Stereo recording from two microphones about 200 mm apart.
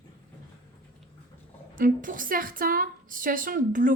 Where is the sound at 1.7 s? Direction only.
40° right (ahead or behind).